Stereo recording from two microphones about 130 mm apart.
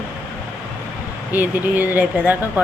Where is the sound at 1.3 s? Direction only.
15° right (ahead or behind).